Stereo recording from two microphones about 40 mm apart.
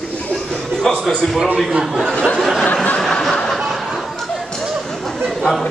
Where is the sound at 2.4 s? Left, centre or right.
Centre.